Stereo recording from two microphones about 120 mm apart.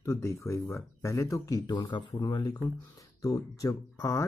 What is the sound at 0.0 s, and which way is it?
Speech, 25° left (ahead or behind).